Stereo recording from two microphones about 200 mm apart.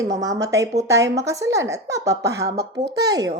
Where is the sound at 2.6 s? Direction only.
55° right (ahead or behind).